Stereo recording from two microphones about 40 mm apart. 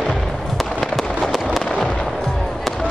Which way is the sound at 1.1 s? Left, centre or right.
Centre.